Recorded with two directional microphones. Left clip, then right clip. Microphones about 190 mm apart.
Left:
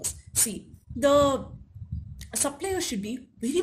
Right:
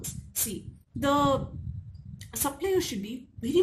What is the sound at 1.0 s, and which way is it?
Speech, 45° left (ahead or behind).